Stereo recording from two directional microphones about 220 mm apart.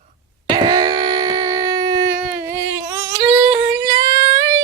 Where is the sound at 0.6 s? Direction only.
20° right (ahead or behind).